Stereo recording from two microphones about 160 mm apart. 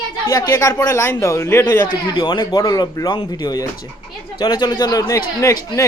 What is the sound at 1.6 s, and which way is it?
Speech, 25° left (ahead or behind).